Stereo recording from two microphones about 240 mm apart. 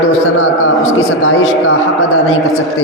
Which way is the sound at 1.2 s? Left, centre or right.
Left.